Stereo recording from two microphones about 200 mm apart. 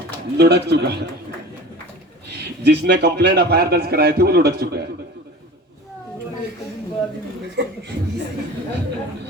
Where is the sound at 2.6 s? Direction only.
55° right (ahead or behind).